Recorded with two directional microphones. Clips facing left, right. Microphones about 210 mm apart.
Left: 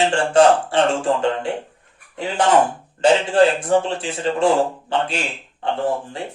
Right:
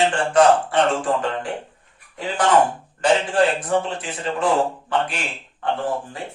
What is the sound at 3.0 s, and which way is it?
A man's voice, 30° left (ahead or behind).